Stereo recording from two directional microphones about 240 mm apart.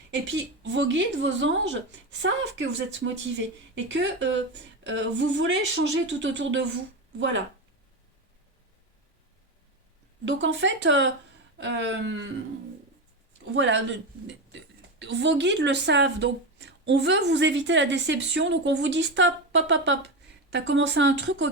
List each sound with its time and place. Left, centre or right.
0.3 s speech: right
10.2 s speech: right
13.4 s speech: right